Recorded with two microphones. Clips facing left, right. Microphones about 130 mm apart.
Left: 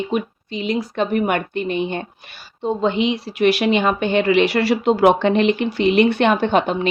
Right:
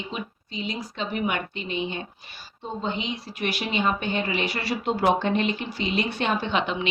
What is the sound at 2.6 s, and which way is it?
A woman's voice, 75° left (ahead or behind).